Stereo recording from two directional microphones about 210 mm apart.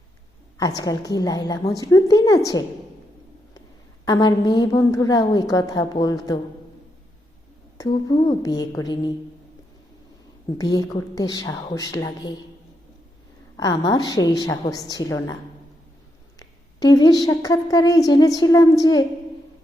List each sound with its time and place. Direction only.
0.8 s a woman's voice: 15° left (ahead or behind)
4.0 s a woman's voice: 20° left (ahead or behind)
7.8 s a woman's voice: 20° left (ahead or behind)
10.6 s a woman's voice: 20° left (ahead or behind)
13.6 s a woman's voice: 20° left (ahead or behind)
16.4 s a woman's voice: 15° left (ahead or behind)